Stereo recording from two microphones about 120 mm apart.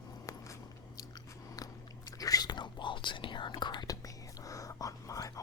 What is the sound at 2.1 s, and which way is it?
Whispering, 30° left (ahead or behind).